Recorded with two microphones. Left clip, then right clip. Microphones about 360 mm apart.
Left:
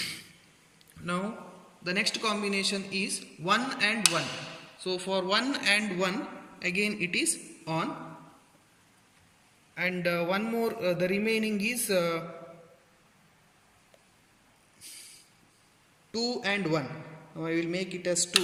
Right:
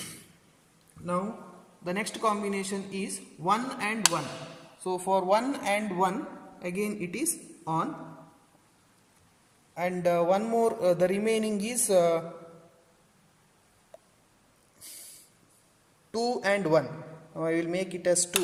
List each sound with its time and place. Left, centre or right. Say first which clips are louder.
1.9 s a man's voice: even; centre
9.7 s speech: right 3 dB; centre
14.8 s a sound: left 1 dB; right
16.1 s speech: right 3 dB; right